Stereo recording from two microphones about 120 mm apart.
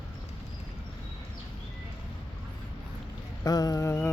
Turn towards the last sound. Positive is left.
turn(degrees=25)  # may be behind; listen again after turning